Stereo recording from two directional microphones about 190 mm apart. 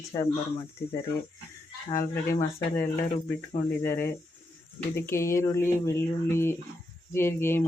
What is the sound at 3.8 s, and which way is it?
Speech, 10° left (ahead or behind).